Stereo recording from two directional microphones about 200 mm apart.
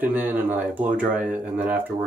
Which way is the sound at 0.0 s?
10° right (ahead or behind).